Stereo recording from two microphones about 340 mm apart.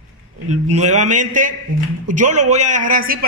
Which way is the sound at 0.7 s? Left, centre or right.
Right.